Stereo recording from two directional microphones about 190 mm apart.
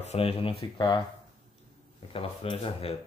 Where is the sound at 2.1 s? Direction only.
30° left (ahead or behind).